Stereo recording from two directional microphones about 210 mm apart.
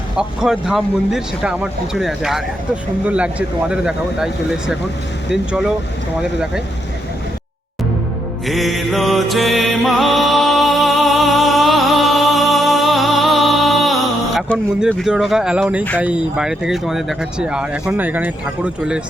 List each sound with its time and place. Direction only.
0.2 s speech: 5° right (ahead or behind)
8.4 s music: centre (ahead or behind)
16.0 s speech: 5° right (ahead or behind)